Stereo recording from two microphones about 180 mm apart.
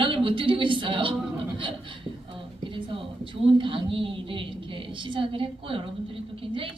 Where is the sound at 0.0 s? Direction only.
30° right (ahead or behind).